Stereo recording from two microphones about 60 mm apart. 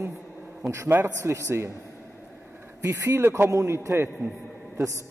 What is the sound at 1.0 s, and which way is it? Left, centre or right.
Speech, right.